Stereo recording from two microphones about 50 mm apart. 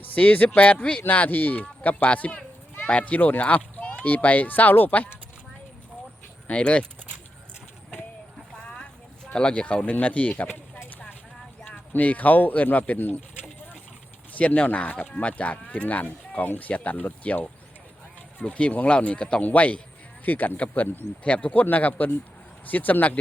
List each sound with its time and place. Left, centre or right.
0.0 s speech: left
1.0 s a child's voice: left
6.5 s speech: left
8.5 s a sound: centre; by 10.5 s left
11.9 s speech: left
14.3 s speech: left
21.2 s speech: left